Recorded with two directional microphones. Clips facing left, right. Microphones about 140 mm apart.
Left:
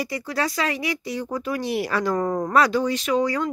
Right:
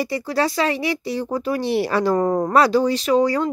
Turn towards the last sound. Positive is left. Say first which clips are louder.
# right 4 dB
turn(degrees=-35)  # may be behind; listen again after turning